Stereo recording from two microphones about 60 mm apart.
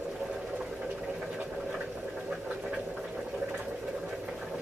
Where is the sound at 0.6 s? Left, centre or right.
Centre.